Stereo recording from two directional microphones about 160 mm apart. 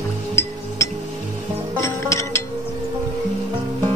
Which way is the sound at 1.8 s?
20° left (ahead or behind).